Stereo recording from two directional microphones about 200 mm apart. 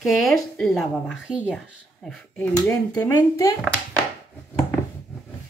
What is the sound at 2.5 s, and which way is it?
Speech, 15° left (ahead or behind).